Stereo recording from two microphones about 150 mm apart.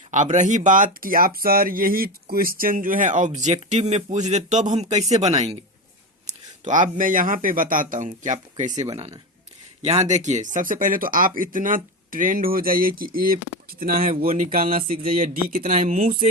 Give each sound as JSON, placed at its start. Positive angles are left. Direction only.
{"t": 0.1, "sound": "speech", "side_deg": -55}
{"t": 6.2, "sound": "speech", "side_deg": -60}
{"t": 9.8, "sound": "speech", "side_deg": -50}